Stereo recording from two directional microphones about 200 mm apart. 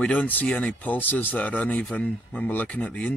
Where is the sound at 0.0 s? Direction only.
10° left (ahead or behind).